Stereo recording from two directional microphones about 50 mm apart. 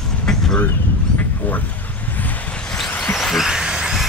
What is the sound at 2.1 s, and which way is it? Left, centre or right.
Vehicle, left.